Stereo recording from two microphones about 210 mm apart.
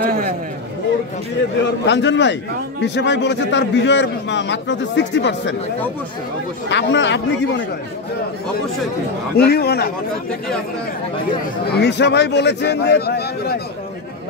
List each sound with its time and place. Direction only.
0.0 s a sound: 45° right (ahead or behind)
1.9 s a man's voice: 55° left (ahead or behind)
6.7 s a man's voice: 60° left (ahead or behind)
9.4 s a man's voice: 50° left (ahead or behind)
11.7 s a man's voice: 55° left (ahead or behind)